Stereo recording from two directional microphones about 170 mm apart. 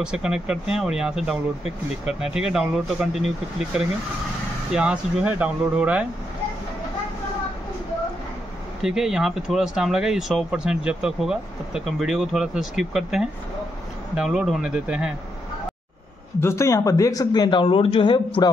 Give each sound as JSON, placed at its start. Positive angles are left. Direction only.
{"t": 0.0, "sound": "speech", "side_deg": -5}
{"t": 4.7, "sound": "speech", "side_deg": -5}
{"t": 8.8, "sound": "speech", "side_deg": -5}
{"t": 16.3, "sound": "speech", "side_deg": 15}